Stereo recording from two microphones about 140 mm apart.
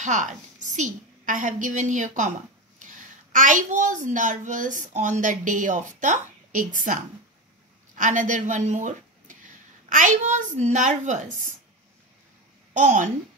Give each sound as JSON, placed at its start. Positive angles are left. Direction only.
{"t": 0.0, "sound": "a woman's voice", "side_deg": -60}
{"t": 8.0, "sound": "speech", "side_deg": -65}
{"t": 12.7, "sound": "a child's voice", "side_deg": -60}